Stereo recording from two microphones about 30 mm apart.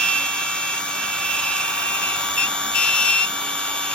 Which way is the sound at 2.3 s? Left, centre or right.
Left.